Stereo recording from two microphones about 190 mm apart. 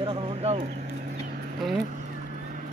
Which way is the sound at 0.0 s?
30° right (ahead or behind).